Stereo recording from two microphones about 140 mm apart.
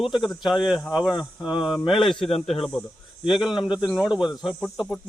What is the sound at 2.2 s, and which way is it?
Speech, 45° left (ahead or behind).